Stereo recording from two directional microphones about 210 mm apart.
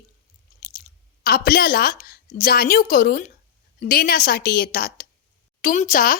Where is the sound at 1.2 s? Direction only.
45° left (ahead or behind).